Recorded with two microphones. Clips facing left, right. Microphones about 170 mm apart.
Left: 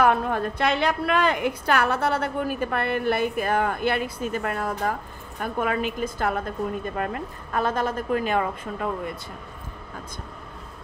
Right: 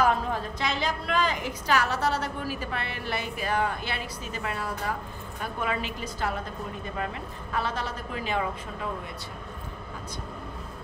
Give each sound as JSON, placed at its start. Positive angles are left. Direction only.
{"t": 0.0, "sound": "a woman's voice", "side_deg": 60}
{"t": 7.5, "sound": "a woman's voice", "side_deg": 50}